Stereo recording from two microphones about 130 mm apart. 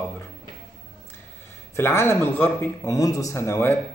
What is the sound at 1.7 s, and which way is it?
A man's voice, 20° left (ahead or behind).